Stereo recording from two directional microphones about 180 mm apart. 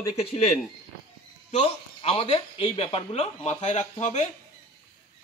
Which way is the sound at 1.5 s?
30° left (ahead or behind).